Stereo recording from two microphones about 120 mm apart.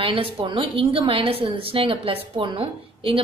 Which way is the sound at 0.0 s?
50° right (ahead or behind).